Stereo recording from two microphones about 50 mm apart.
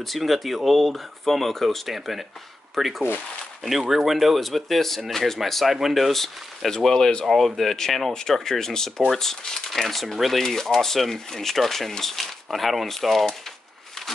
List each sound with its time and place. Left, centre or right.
0.0 s speech: centre
7.2 s speech: centre